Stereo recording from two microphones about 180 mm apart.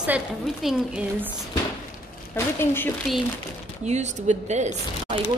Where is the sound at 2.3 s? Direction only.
15° left (ahead or behind).